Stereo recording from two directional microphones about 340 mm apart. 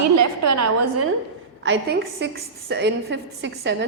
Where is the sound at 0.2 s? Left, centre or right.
Right.